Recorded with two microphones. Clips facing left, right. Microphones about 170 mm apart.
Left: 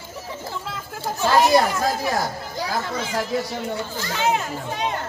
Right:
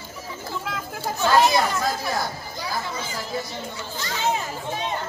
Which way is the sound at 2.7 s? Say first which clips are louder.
Left 5 dB; 70° left (ahead or behind).